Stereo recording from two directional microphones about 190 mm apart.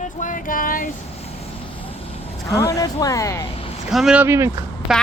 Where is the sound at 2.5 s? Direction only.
15° left (ahead or behind).